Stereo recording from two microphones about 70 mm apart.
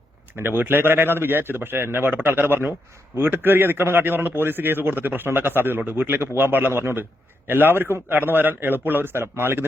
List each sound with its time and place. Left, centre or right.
0.3 s a man's voice: right